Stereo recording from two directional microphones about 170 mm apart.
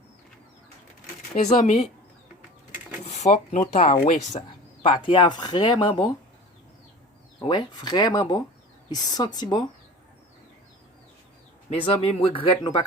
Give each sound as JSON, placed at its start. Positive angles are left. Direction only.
{"t": 1.4, "sound": "speech", "side_deg": 45}
{"t": 3.0, "sound": "speech", "side_deg": 40}
{"t": 5.0, "sound": "speech", "side_deg": 30}
{"t": 7.3, "sound": "speech", "side_deg": 25}
{"t": 11.7, "sound": "speech", "side_deg": 35}